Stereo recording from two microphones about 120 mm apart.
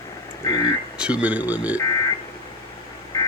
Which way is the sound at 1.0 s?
10° right (ahead or behind).